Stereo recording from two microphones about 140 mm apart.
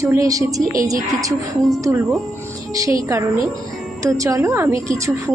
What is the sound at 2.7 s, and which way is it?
A woman's voice, 25° right (ahead or behind).